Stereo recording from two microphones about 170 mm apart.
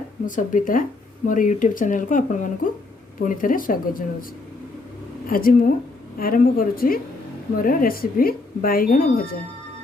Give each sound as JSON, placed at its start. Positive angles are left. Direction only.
{"t": 0.3, "sound": "speech", "side_deg": 50}
{"t": 5.2, "sound": "speech", "side_deg": 55}